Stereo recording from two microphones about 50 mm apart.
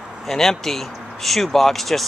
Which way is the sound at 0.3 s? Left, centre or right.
Centre.